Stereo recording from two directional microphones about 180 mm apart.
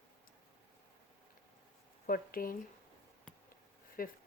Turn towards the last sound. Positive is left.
turn(degrees=50)  # may be behind; listen again after turning